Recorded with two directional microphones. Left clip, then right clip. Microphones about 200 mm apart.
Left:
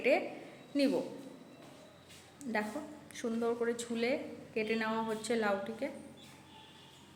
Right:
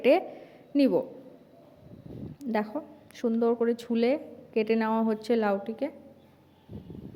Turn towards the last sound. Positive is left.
turn(degrees=-45)  # may be behind; listen again after turning